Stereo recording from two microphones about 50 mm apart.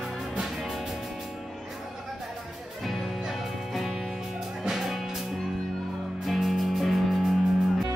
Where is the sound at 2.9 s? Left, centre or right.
Centre.